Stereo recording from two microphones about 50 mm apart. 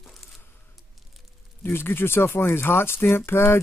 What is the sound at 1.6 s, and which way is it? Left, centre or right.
Speech, left.